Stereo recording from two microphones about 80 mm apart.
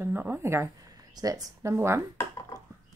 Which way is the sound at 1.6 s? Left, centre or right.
Right.